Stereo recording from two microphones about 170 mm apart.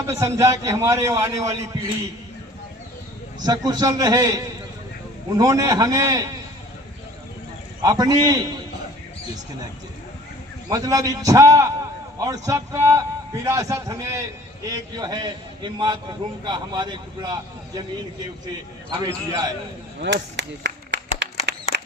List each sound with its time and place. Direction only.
0.1 s a man's voice: 15° right (ahead or behind)
3.4 s a man's voice: 25° right (ahead or behind)
7.8 s a man's voice: 25° right (ahead or behind)
10.7 s a man's voice: 20° right (ahead or behind)
18.9 s a man's voice: 20° right (ahead or behind)
20.0 s a sound: 90° right